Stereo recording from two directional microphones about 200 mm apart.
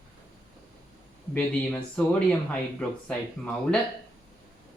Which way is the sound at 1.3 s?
5° left (ahead or behind).